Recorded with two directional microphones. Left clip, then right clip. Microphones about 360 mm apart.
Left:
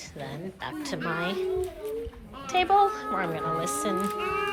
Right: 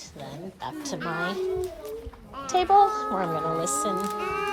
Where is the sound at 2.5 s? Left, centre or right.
Centre.